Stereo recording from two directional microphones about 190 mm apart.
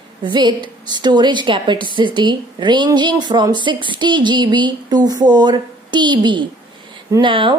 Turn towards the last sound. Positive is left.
turn(degrees=-25)  # may be behind; listen again after turning